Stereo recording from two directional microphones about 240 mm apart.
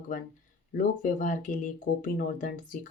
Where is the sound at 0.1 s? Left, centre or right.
Left.